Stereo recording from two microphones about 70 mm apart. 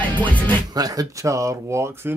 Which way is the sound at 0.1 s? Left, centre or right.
Left.